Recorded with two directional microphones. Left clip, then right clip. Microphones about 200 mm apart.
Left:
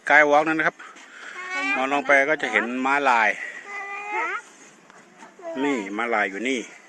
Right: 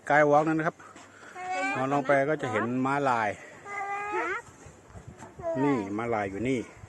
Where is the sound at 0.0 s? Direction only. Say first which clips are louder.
Left 5 dB; centre (ahead or behind).